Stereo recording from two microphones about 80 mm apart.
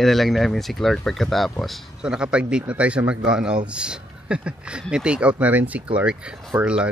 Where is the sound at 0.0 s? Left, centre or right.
Centre.